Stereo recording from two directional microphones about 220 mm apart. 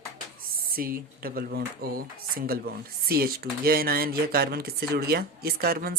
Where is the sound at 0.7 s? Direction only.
40° right (ahead or behind).